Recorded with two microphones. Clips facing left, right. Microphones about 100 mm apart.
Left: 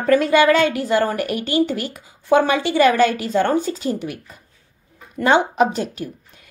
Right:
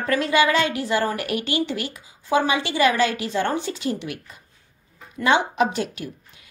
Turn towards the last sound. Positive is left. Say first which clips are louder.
# left 4 dB
turn(degrees=35)  # may be behind; listen again after turning